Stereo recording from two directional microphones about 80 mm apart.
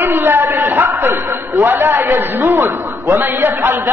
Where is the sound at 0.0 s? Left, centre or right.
Right.